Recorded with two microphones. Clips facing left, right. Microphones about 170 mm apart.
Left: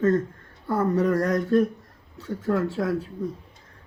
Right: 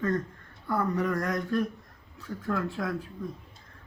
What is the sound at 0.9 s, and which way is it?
Speech, 30° left (ahead or behind).